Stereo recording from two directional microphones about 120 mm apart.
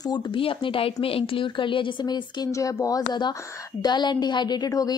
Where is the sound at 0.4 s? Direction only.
50° left (ahead or behind).